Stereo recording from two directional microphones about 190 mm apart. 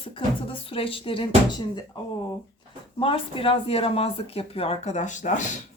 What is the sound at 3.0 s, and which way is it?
Speech, 30° left (ahead or behind).